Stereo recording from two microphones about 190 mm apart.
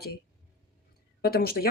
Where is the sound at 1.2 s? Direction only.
55° left (ahead or behind).